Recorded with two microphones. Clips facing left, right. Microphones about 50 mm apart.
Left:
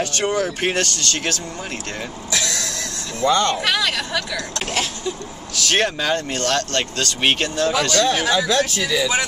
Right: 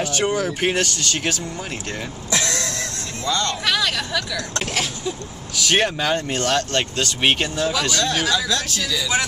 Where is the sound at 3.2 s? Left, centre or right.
Left.